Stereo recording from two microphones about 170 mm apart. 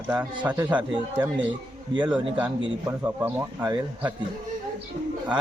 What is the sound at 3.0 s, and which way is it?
Speech, 15° right (ahead or behind).